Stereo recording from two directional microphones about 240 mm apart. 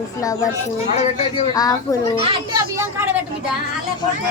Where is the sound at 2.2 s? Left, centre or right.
Centre.